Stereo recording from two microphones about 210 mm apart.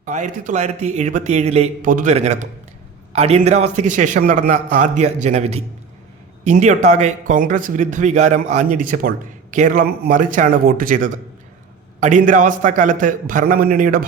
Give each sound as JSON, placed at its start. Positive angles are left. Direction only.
{"t": 0.0, "sound": "a man's voice", "side_deg": -35}